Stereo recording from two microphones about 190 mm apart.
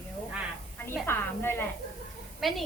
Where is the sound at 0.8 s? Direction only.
10° left (ahead or behind).